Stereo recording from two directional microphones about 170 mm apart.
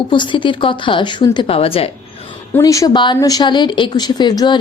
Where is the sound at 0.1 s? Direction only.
30° left (ahead or behind).